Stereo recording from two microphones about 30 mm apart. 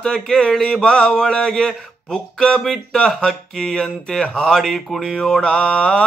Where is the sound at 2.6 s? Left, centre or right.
Centre.